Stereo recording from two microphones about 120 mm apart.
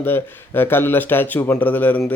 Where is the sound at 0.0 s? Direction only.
15° left (ahead or behind).